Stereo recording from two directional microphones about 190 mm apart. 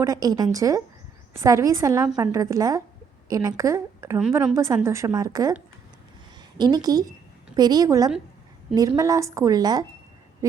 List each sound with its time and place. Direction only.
0.0 s a woman's voice: 20° right (ahead or behind)
6.6 s a woman's voice: 20° right (ahead or behind)